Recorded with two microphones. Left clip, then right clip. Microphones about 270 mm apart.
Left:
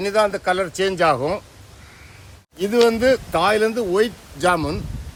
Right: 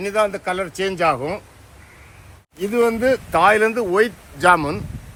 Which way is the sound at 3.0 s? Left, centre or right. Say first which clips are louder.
Right 2 dB; centre.